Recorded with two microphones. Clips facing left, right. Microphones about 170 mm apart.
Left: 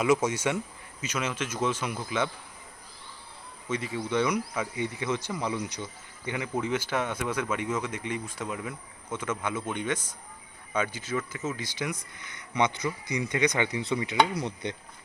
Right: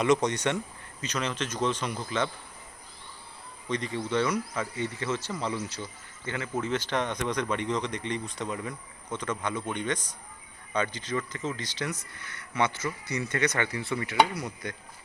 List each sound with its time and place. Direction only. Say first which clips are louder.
0.0 s speech: even; 5° left (ahead or behind)
3.7 s speech: even; 5° left (ahead or behind); by 14.8 s 25° left (ahead or behind)